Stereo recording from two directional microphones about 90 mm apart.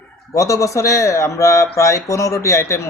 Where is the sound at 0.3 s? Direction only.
35° left (ahead or behind).